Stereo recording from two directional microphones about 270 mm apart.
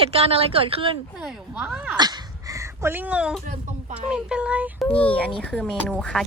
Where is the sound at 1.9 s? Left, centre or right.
Centre.